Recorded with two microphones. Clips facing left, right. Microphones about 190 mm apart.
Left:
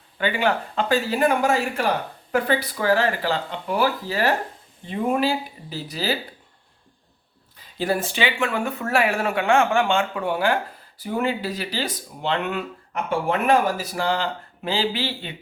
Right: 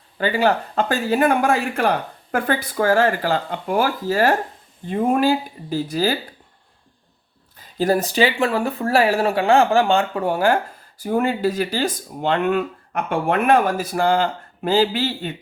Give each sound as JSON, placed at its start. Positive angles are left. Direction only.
{"t": 0.2, "sound": "speech", "side_deg": -40}
{"t": 7.6, "sound": "speech", "side_deg": -40}